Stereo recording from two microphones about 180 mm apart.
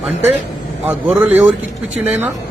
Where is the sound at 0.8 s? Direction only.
10° right (ahead or behind).